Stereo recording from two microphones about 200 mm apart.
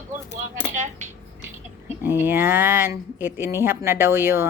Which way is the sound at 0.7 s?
35° right (ahead or behind).